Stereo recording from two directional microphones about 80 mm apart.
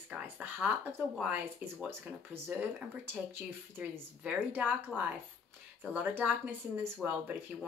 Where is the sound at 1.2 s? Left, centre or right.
Right.